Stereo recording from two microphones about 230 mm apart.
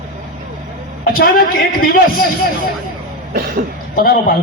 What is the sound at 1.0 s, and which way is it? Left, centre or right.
Speech, left.